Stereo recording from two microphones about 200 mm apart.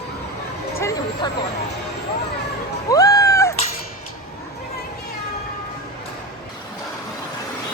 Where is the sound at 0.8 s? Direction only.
15° left (ahead or behind).